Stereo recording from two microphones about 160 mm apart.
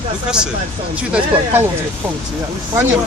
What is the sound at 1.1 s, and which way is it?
Speech, 10° right (ahead or behind).